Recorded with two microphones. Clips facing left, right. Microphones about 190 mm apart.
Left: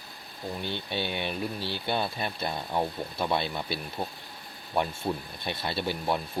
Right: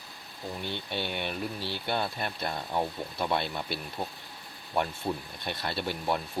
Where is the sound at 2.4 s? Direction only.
10° left (ahead or behind).